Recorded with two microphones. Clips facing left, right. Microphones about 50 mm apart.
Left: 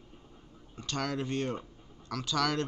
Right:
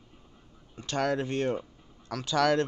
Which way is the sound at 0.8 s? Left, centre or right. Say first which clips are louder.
Right 5 dB; right.